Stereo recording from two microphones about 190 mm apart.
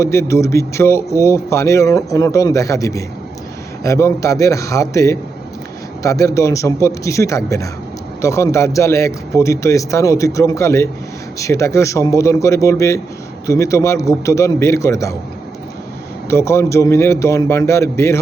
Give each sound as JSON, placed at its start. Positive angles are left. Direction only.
{"t": 0.0, "sound": "speech", "side_deg": 15}
{"t": 16.3, "sound": "speech", "side_deg": 15}